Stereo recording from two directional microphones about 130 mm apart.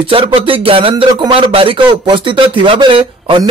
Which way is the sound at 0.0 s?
45° right (ahead or behind).